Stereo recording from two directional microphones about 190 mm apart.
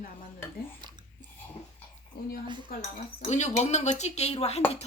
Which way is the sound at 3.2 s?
40° left (ahead or behind).